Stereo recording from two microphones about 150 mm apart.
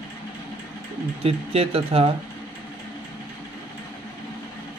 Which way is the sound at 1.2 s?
40° right (ahead or behind).